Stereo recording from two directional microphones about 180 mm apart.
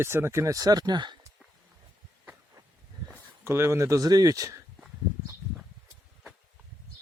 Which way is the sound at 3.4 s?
15° right (ahead or behind).